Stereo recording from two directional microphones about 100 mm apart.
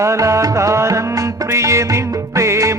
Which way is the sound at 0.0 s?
30° right (ahead or behind).